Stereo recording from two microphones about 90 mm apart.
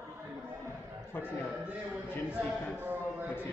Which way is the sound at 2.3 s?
15° right (ahead or behind).